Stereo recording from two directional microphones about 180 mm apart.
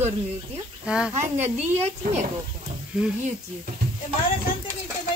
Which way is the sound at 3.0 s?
5° right (ahead or behind).